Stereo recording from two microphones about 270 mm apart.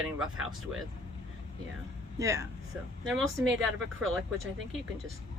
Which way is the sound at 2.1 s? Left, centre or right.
Centre.